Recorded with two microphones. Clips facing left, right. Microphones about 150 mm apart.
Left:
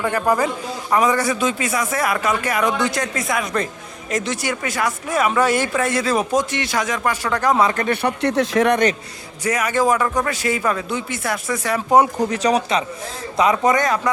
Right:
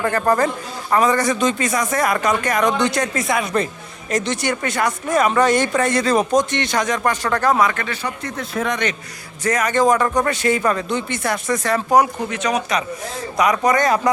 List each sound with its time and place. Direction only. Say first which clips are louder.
0.0 s speech: right 1 dB; 10° left (ahead or behind)
7.6 s speech: left 1 dB; 30° left (ahead or behind)
7.9 s speech: left 7 dB; 65° left (ahead or behind)
9.4 s speech: right 2 dB; 10° left (ahead or behind)
12.2 s speech: left 3 dB; 35° left (ahead or behind)